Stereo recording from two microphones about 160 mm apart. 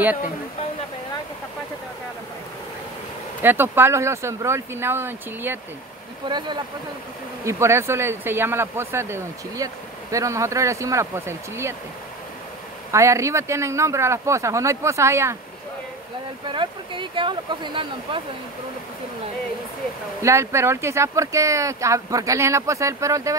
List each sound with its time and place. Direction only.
3.4 s speech: 15° right (ahead or behind)
6.2 s speech: 30° right (ahead or behind)
7.4 s speech: 15° right (ahead or behind)
12.9 s speech: 20° right (ahead or behind)
16.4 s speech: 30° right (ahead or behind)
20.2 s speech: 20° right (ahead or behind)